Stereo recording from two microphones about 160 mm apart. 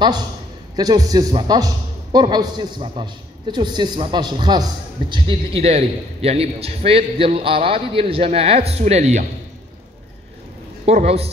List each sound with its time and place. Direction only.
0.7 s a man's voice: 25° right (ahead or behind); by 9.2 s 45° right (ahead or behind)
10.9 s a man's voice: 40° right (ahead or behind)